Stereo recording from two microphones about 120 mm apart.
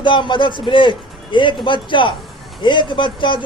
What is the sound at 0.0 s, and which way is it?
A man's voice, 40° left (ahead or behind).